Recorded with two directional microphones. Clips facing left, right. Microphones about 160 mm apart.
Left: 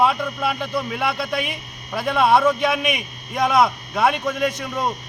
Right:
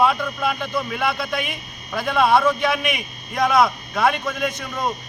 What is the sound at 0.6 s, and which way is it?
Speech, 30° left (ahead or behind).